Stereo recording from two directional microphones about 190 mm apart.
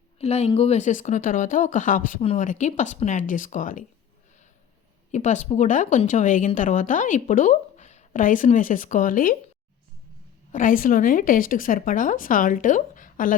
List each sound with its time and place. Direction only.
0.2 s a woman's voice: 35° left (ahead or behind)
5.1 s a woman's voice: 40° left (ahead or behind)
10.5 s a woman's voice: 45° left (ahead or behind)